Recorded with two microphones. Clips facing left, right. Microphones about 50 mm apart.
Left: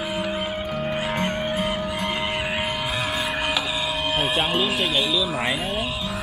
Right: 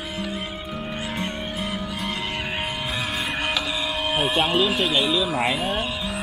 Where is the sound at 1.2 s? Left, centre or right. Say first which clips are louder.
Left 5 dB; left.